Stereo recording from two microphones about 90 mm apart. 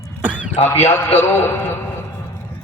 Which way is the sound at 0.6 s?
25° left (ahead or behind).